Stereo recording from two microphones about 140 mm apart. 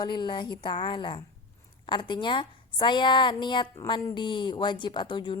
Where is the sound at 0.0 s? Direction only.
30° left (ahead or behind).